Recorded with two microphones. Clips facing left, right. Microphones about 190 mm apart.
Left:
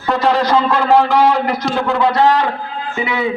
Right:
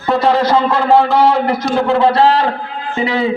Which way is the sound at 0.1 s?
20° right (ahead or behind).